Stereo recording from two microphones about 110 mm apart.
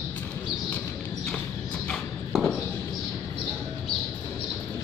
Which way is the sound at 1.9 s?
5° left (ahead or behind).